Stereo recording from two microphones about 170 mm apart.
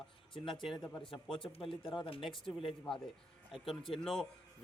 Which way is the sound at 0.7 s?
30° left (ahead or behind).